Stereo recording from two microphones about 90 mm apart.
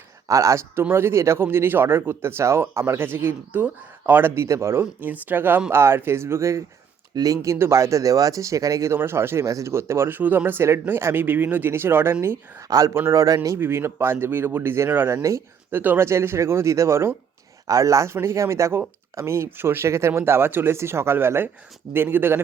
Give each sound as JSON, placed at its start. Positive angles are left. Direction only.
{"t": 0.3, "sound": "speech", "side_deg": -35}
{"t": 12.6, "sound": "speech", "side_deg": -40}
{"t": 12.9, "sound": "speech", "side_deg": -30}
{"t": 13.2, "sound": "speech", "side_deg": -40}
{"t": 13.6, "sound": "speech", "side_deg": -25}
{"t": 15.7, "sound": "speech", "side_deg": -20}